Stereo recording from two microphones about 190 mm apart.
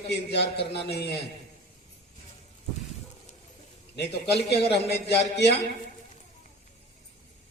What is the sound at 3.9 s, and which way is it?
Speech, 60° left (ahead or behind).